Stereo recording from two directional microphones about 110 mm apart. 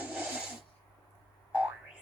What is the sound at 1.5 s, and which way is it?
Boing, 15° right (ahead or behind).